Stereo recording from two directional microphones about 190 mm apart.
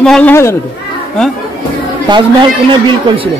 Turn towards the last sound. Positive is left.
turn(degrees=-25)  # may be behind; listen again after turning